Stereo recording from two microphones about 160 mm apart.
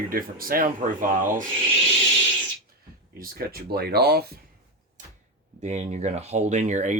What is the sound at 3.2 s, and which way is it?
Speech, 70° right (ahead or behind).